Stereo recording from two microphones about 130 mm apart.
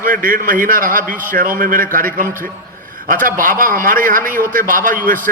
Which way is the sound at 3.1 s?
90° right.